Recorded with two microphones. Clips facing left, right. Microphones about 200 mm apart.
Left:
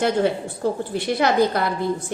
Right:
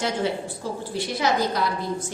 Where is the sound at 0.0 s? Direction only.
55° left (ahead or behind).